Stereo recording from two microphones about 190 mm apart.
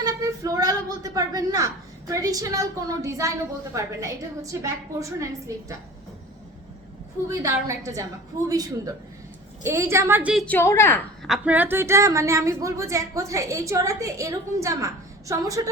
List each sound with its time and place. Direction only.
0.0 s a sound: 20° right (ahead or behind)
3.7 s a woman's voice: 15° right (ahead or behind)
7.3 s a woman's voice: 15° right (ahead or behind)
10.4 s a woman's voice: 10° left (ahead or behind)
11.3 s a woman's voice: 10° right (ahead or behind)